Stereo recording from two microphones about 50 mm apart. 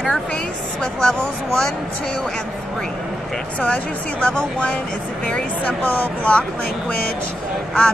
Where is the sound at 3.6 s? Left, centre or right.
Left.